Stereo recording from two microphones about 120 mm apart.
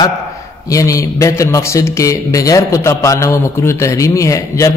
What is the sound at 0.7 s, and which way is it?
A man's voice, 25° left (ahead or behind).